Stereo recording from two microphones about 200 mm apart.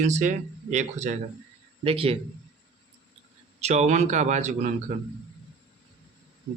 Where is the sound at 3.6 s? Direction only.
35° right (ahead or behind).